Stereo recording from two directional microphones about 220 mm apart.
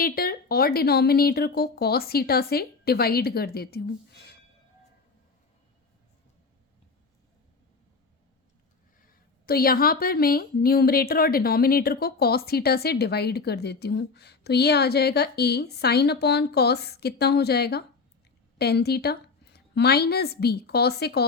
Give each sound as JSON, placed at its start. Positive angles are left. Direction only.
{"t": 0.0, "sound": "speech", "side_deg": 40}
{"t": 9.5, "sound": "a woman's voice", "side_deg": 45}